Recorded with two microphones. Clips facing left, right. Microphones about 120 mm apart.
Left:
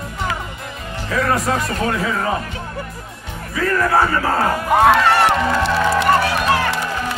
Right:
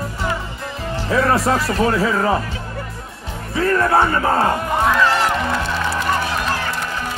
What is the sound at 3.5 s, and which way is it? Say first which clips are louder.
Speech: right 1 dB; 30° right (ahead or behind).